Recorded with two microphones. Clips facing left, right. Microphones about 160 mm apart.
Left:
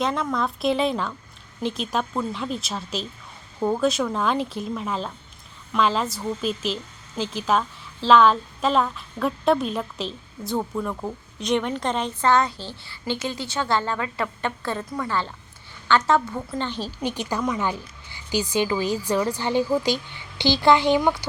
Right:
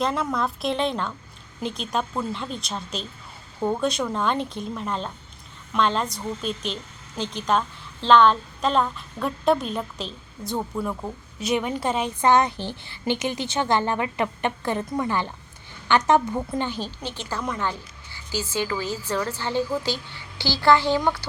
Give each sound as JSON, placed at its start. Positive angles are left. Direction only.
{"t": 0.0, "sound": "a woman's voice", "side_deg": 0}
{"t": 17.0, "sound": "a woman's voice", "side_deg": 15}